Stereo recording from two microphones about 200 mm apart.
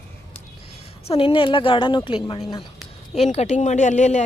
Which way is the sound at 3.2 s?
35° left (ahead or behind).